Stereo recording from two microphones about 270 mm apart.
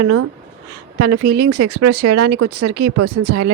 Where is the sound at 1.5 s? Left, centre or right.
Right.